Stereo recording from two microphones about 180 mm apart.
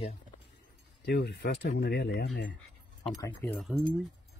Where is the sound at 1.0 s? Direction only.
65° left (ahead or behind).